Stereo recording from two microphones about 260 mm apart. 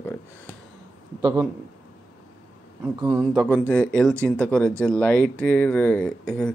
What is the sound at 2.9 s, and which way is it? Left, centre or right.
A man's voice, centre.